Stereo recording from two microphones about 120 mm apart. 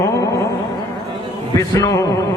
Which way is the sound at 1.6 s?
30° left (ahead or behind).